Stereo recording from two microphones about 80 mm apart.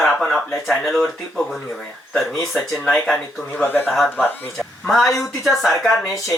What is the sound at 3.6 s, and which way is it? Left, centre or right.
Speech, left.